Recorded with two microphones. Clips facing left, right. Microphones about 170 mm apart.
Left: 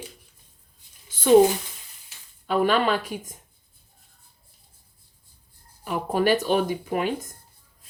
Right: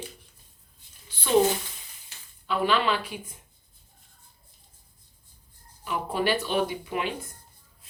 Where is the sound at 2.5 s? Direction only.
45° left (ahead or behind).